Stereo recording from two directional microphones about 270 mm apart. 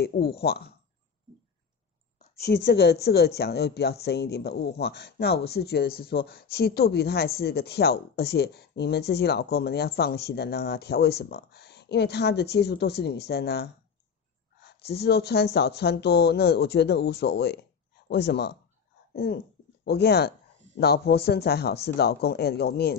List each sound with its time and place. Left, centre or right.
0.0 s a woman's voice: left
2.1 s a woman's voice: left